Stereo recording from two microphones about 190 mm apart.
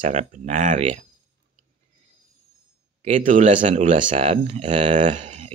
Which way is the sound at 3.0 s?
40° right (ahead or behind).